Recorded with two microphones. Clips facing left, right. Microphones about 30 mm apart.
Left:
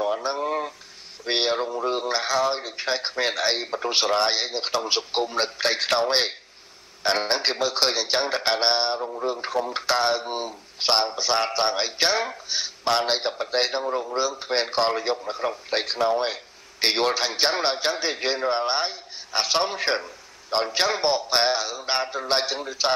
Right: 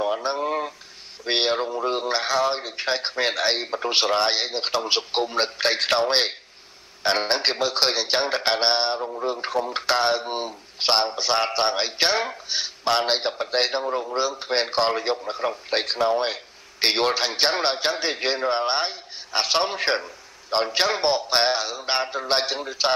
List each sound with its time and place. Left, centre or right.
0.0 s a sound: centre
1.2 s a man's voice: centre
12.8 s a man's voice: centre
14.1 s a man's voice: centre